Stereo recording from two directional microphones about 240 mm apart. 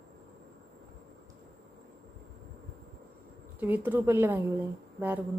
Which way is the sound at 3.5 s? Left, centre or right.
Centre.